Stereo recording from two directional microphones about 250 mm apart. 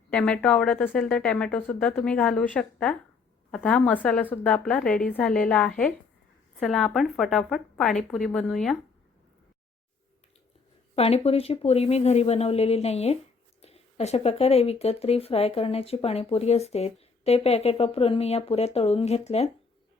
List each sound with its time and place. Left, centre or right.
0.1 s a woman's voice: centre
10.9 s speech: left